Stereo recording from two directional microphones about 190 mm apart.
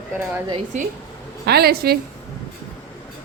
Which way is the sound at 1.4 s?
55° right (ahead or behind).